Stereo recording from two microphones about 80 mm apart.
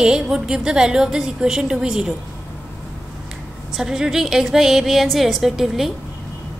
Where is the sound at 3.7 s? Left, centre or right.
Centre.